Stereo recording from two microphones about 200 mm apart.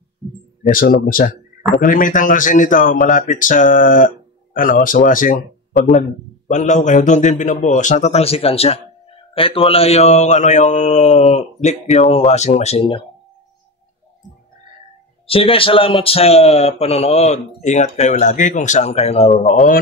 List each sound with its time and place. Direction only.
0.7 s a man's voice: 45° left (ahead or behind); by 13.0 s 30° left (ahead or behind)
15.2 s a man's voice: 30° left (ahead or behind)